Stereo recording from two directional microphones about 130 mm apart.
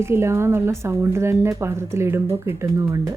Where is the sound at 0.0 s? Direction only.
20° right (ahead or behind).